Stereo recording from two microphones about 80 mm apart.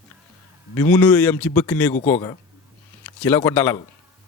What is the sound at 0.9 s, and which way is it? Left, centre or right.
A man's voice, centre.